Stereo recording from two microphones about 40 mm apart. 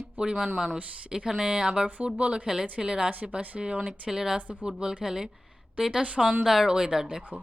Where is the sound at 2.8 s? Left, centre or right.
Centre.